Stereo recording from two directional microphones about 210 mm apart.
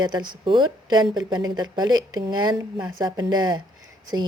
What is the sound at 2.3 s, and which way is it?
Speech, 20° right (ahead or behind).